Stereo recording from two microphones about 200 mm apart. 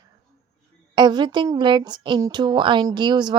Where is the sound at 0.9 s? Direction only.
20° right (ahead or behind).